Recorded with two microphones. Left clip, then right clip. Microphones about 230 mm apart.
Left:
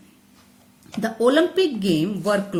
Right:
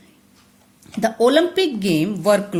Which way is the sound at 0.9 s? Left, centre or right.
Right.